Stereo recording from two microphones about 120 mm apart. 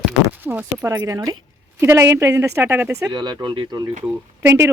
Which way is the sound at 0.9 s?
25° right (ahead or behind).